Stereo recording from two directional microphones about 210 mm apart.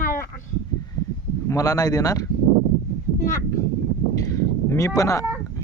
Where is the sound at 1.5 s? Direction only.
15° left (ahead or behind).